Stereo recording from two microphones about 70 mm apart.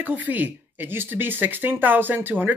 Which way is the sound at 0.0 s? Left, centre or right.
Right.